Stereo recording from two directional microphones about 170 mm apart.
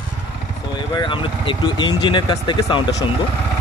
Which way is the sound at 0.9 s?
30° left (ahead or behind).